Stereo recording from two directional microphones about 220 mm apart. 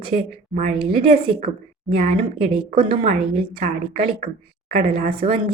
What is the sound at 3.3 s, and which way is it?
Speech, 25° right (ahead or behind).